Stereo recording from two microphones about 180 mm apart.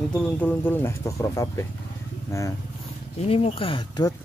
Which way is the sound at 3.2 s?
35° left (ahead or behind).